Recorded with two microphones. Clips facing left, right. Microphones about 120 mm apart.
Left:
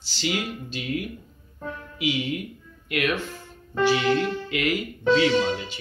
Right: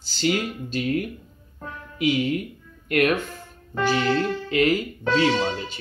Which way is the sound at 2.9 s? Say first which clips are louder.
Right 5 dB; 45° right (ahead or behind).